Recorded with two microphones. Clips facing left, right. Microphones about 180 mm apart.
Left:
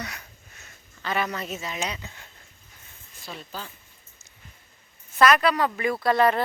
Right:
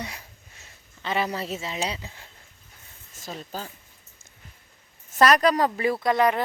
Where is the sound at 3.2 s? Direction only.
40° right (ahead or behind).